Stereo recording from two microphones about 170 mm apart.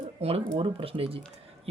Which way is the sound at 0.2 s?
35° right (ahead or behind).